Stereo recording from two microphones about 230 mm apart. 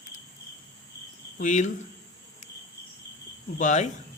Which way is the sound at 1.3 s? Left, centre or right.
Left.